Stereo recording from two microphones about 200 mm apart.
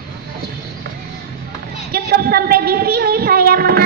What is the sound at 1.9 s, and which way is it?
Child singing, 50° right (ahead or behind).